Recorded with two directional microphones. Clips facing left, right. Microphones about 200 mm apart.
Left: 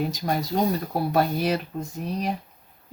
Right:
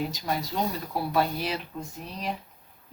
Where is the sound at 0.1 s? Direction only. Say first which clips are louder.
Left 5 dB; 45° left (ahead or behind).